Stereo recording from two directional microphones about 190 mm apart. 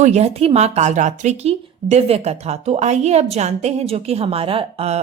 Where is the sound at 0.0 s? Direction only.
35° right (ahead or behind).